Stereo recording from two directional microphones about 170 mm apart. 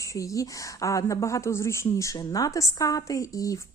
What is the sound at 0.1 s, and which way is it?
A woman's voice, 20° left (ahead or behind).